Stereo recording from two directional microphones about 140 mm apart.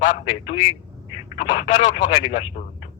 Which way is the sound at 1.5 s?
60° left (ahead or behind).